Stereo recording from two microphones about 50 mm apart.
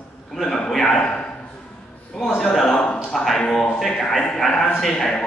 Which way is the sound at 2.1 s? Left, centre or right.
Centre.